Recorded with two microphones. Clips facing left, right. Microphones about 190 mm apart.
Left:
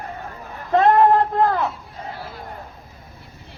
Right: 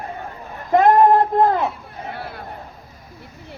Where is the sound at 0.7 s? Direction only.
15° right (ahead or behind).